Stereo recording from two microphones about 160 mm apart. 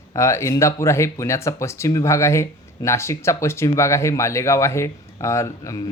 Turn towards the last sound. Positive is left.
turn(degrees=20)  # may be behind; listen again after turning